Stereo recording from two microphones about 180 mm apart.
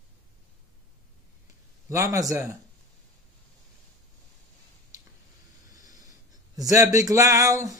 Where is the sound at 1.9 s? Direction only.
20° right (ahead or behind).